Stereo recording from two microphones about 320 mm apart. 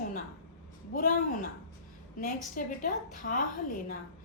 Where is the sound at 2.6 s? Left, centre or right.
Left.